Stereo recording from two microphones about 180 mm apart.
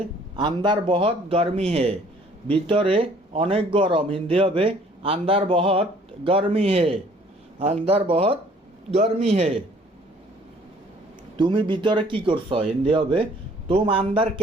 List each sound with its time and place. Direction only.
0.3 s speech: 25° right (ahead or behind)
11.3 s speech: 25° right (ahead or behind)